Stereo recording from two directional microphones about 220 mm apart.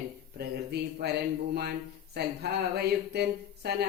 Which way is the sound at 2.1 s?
50° right (ahead or behind).